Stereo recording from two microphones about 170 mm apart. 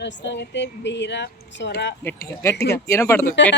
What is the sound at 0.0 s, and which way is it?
Speech, 90° left.